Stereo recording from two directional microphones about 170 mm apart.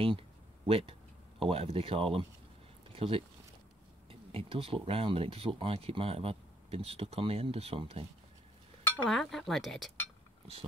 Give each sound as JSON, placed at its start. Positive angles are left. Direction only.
{"t": 0.7, "sound": "speech", "side_deg": -35}
{"t": 9.0, "sound": "speech", "side_deg": 0}